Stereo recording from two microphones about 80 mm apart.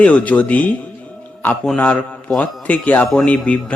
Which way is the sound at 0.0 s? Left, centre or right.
Centre.